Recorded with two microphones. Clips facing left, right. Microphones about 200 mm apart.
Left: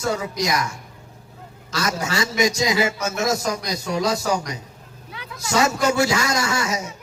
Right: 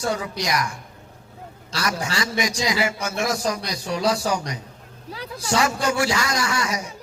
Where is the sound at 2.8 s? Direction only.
25° left (ahead or behind).